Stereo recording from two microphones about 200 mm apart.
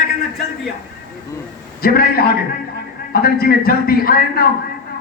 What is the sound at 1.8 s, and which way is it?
A man's voice, 50° left (ahead or behind).